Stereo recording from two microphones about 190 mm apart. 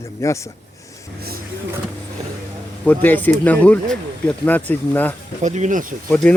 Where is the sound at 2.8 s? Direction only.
10° left (ahead or behind).